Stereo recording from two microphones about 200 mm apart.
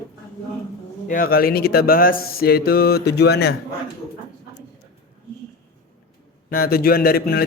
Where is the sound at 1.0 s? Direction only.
45° left (ahead or behind).